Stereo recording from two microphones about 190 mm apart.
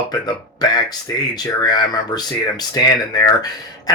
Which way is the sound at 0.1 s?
20° left (ahead or behind).